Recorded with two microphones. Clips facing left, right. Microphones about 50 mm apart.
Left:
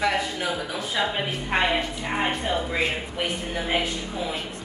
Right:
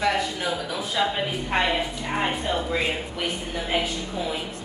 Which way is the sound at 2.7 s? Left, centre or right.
Left.